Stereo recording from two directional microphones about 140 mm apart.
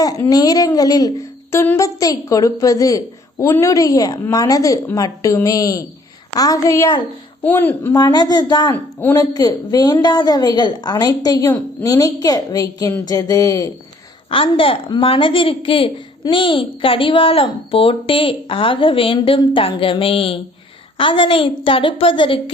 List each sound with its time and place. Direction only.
0.0 s speech: 25° left (ahead or behind)
7.4 s a woman's voice: 15° left (ahead or behind)
7.9 s speech: 30° left (ahead or behind)
8.7 s a woman's voice: 15° left (ahead or behind)
9.1 s speech: 25° left (ahead or behind)
14.3 s a woman's voice: 40° left (ahead or behind)